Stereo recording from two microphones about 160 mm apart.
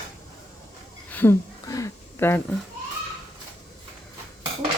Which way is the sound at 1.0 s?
10° left (ahead or behind).